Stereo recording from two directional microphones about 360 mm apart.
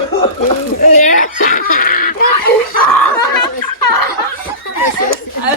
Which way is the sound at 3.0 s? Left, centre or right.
Left.